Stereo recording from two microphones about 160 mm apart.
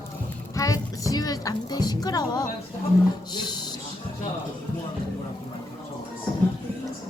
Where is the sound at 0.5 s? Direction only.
20° left (ahead or behind).